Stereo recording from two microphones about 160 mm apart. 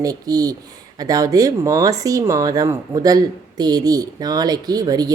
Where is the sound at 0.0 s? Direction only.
20° right (ahead or behind).